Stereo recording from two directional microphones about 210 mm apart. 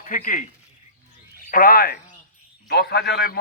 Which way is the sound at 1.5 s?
45° left (ahead or behind).